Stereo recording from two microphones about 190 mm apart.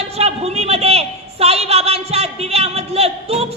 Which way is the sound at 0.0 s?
35° right (ahead or behind).